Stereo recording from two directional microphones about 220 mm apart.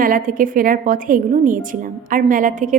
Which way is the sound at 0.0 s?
40° right (ahead or behind).